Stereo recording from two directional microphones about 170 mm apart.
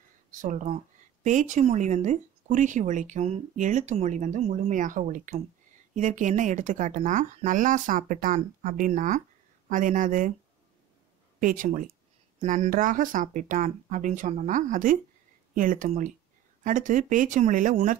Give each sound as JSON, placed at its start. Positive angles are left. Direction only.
{"t": 0.3, "sound": "speech", "side_deg": -45}
{"t": 11.3, "sound": "speech", "side_deg": -50}